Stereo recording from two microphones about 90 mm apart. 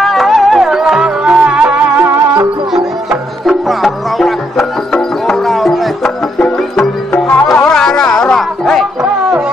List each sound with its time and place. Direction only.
0.0 s music: centre (ahead or behind)
7.1 s music: 20° left (ahead or behind)
7.6 s music: 5° left (ahead or behind)